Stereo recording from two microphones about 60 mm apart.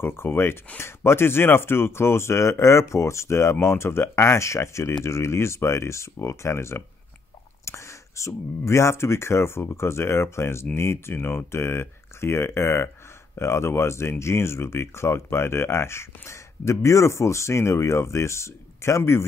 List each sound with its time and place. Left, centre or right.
0.0 s speech: left